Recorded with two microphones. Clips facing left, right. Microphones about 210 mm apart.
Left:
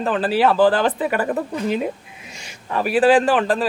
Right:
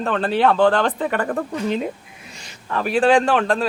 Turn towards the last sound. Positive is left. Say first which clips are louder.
# left 1 dB
turn(degrees=5)  # may be behind; listen again after turning